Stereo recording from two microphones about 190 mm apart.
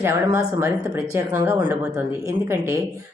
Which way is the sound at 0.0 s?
15° right (ahead or behind).